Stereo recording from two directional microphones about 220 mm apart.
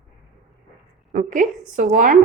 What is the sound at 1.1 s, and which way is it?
Speech, 35° right (ahead or behind).